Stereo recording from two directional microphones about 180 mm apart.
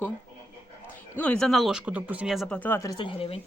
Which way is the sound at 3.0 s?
30° left (ahead or behind).